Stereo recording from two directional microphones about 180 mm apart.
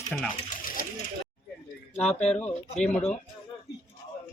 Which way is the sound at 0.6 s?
50° left (ahead or behind).